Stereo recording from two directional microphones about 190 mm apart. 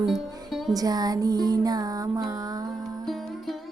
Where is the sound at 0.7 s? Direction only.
20° right (ahead or behind).